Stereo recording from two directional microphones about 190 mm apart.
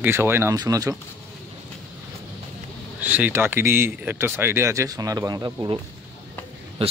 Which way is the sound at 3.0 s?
10° right (ahead or behind).